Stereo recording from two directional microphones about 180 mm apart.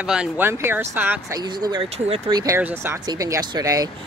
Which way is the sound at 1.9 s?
35° right (ahead or behind).